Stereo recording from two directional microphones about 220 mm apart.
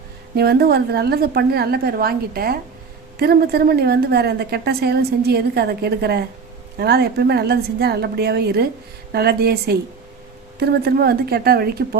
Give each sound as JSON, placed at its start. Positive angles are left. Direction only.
{"t": 0.3, "sound": "a woman's voice", "side_deg": -45}